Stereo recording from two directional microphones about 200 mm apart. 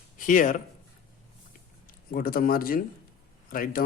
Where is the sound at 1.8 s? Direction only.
45° left (ahead or behind).